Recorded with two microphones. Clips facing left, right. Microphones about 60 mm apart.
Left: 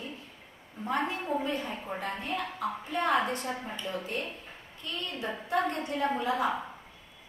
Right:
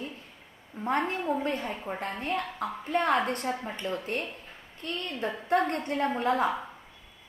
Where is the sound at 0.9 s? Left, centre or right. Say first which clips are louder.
Right 2 dB; right.